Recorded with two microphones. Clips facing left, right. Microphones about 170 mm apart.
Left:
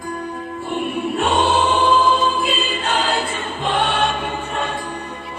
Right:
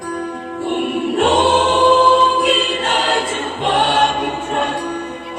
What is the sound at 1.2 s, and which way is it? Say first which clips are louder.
Choir: right 4 dB; 90° right.